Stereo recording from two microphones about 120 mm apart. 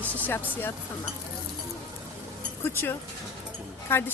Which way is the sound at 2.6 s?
15° left (ahead or behind).